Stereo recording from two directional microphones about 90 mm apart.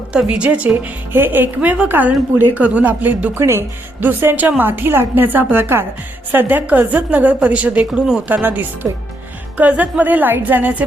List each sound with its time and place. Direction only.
0.1 s a woman's voice: 10° right (ahead or behind)
8.3 s a woman's voice: 20° right (ahead or behind)